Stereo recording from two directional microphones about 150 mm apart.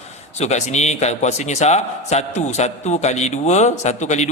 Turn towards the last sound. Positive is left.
turn(degrees=50)  # may be behind; listen again after turning